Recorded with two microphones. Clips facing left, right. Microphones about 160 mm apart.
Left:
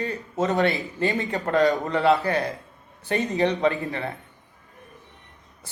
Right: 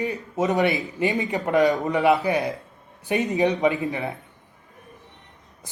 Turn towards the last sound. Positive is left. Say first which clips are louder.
# right 2 dB
turn(degrees=-15)  # may be behind; listen again after turning